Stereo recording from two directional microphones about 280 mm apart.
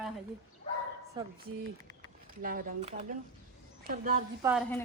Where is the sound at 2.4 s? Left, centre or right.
Right.